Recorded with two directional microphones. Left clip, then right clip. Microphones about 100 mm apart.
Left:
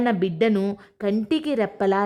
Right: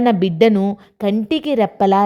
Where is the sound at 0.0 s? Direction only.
45° right (ahead or behind).